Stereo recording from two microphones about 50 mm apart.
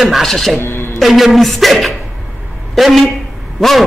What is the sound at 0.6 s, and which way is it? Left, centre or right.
Music, left.